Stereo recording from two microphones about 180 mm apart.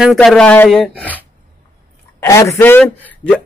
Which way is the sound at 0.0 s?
Centre (ahead or behind).